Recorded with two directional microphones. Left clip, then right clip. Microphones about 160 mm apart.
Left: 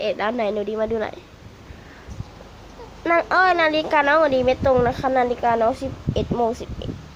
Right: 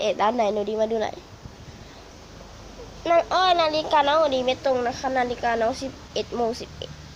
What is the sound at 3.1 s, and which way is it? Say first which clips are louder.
Speech: left 2 dB; 75° left (ahead or behind).